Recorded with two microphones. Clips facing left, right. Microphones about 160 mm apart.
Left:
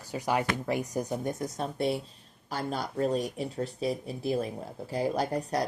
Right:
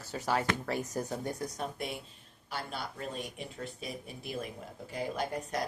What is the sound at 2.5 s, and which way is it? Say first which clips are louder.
Speech: left 6 dB; 40° left (ahead or behind).